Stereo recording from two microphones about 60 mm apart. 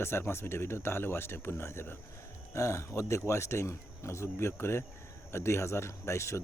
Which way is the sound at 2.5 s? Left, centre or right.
Left.